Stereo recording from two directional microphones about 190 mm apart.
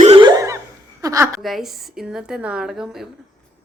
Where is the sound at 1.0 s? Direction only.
15° right (ahead or behind).